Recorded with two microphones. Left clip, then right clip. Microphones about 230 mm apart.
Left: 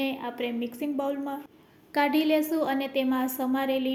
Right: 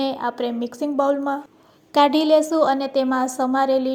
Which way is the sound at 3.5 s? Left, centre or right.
Centre.